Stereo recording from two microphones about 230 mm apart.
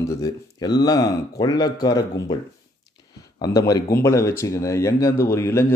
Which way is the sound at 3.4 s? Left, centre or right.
Centre.